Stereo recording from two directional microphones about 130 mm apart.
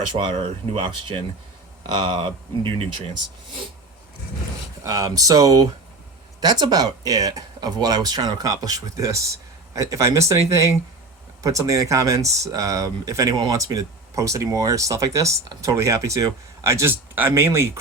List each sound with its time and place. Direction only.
0.7 s speech: 40° right (ahead or behind)
4.8 s speech: 25° right (ahead or behind)